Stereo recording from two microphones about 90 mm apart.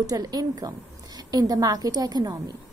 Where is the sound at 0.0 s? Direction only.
45° right (ahead or behind).